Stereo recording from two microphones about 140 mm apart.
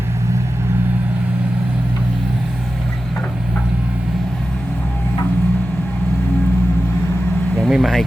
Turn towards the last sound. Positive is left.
turn(degrees=0)  # may be behind; listen again after turning